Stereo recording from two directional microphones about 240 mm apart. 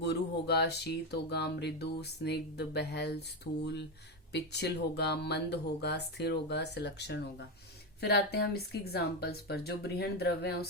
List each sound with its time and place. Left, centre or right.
0.0 s speech: left